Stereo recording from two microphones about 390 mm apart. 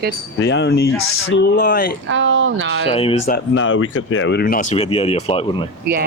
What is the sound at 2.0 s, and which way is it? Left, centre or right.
Speech, right.